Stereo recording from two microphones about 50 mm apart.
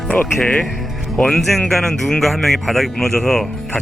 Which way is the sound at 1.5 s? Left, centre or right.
Centre.